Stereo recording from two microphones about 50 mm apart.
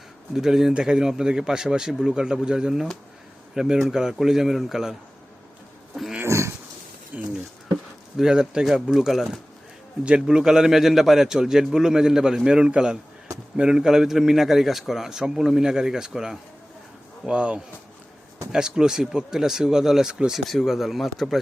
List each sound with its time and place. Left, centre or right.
0.3 s a man's voice: centre
6.2 s dog: right
7.1 s a sound: right
8.1 s a man's voice: centre
20.4 s speech: centre
20.7 s speech: centre